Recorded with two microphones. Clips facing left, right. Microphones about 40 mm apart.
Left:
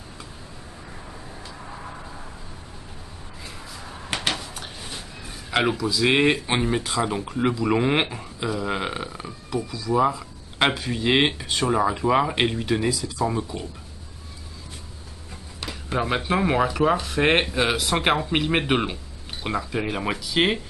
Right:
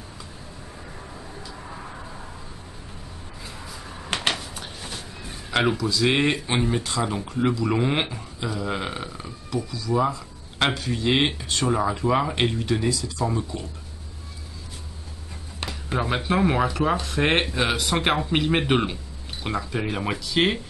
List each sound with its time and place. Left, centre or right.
4.3 s a sound: centre
5.5 s speech: centre
15.7 s speech: centre